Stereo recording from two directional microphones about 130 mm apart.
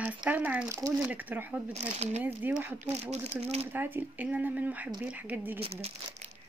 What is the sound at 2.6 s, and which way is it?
Speech, 15° right (ahead or behind).